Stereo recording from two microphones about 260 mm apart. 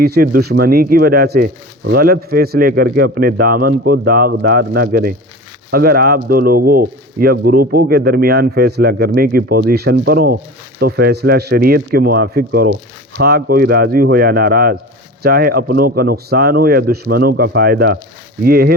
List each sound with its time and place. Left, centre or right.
0.0 s speech: right